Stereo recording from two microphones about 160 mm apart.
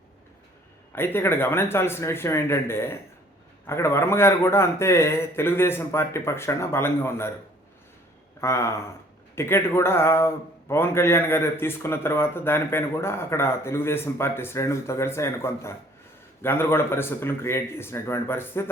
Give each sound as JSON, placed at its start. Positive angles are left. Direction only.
{"t": 0.9, "sound": "a man's voice", "side_deg": 15}
{"t": 8.4, "sound": "a man's voice", "side_deg": 20}